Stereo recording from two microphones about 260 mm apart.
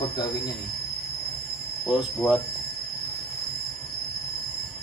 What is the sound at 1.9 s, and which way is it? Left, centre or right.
Cricket, centre.